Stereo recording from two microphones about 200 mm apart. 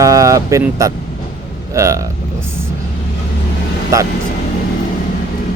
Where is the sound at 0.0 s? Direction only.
15° right (ahead or behind).